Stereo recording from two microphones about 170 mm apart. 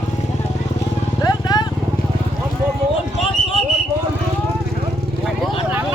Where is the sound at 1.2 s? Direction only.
25° left (ahead or behind).